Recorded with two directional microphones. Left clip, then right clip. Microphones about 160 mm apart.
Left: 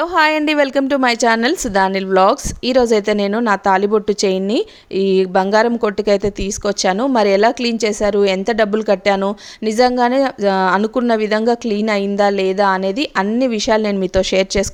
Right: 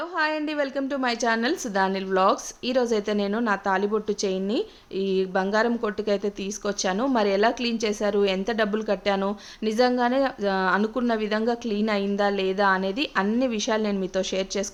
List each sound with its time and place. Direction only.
0.0 s a woman's voice: 70° left (ahead or behind); by 14.7 s 55° left (ahead or behind)